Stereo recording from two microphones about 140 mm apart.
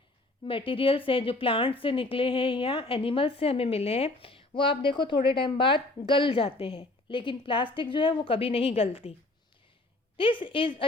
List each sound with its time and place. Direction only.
0.4 s speech: 40° left (ahead or behind)
10.2 s speech: 35° left (ahead or behind)